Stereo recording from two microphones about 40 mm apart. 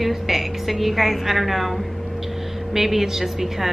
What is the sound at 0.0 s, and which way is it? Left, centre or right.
A woman's voice, centre.